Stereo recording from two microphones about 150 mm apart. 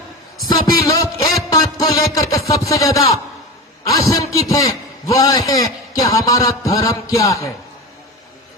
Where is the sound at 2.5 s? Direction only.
20° left (ahead or behind).